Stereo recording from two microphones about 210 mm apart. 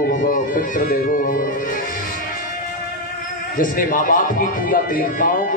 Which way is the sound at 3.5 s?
40° left (ahead or behind).